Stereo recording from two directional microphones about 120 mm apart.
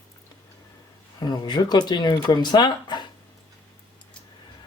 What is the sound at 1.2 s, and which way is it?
Speech, 35° left (ahead or behind).